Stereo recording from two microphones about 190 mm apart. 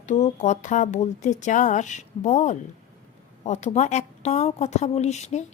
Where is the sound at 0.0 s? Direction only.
40° left (ahead or behind).